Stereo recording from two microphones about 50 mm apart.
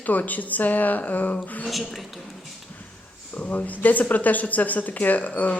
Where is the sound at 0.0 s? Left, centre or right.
Left.